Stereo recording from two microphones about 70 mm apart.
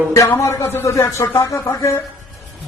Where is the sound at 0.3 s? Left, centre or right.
Left.